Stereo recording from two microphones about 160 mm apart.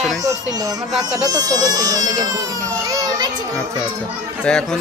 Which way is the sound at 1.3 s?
25° right (ahead or behind).